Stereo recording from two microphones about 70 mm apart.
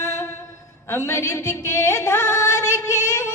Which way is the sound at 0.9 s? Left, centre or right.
Left.